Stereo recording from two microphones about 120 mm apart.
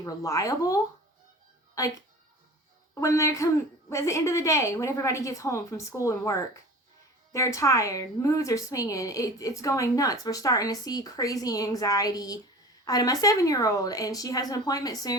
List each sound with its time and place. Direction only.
0.0 s a woman's voice: 25° left (ahead or behind)